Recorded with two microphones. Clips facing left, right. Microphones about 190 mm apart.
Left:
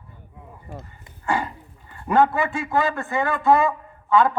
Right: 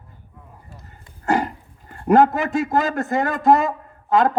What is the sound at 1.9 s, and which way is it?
A man's voice, 45° right (ahead or behind).